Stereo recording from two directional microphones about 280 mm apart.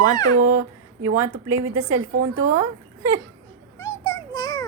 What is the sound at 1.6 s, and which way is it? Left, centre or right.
A woman's voice, right.